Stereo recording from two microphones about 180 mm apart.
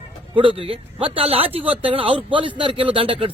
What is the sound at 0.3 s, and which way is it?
A man's voice, 30° right (ahead or behind).